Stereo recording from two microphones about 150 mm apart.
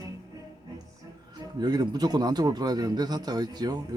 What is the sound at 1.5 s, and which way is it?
Speech, 25° right (ahead or behind).